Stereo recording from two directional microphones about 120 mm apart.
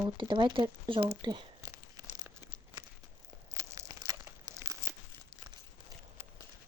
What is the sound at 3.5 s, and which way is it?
Crumpling, 25° right (ahead or behind).